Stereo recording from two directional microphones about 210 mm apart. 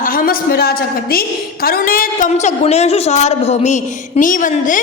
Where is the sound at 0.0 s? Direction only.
40° left (ahead or behind).